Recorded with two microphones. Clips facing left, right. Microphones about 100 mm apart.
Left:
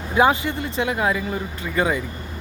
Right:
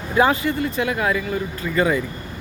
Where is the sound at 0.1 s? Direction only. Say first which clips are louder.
Even; 20° left (ahead or behind).